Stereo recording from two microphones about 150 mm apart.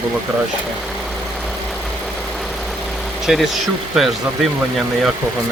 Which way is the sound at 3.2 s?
Centre (ahead or behind).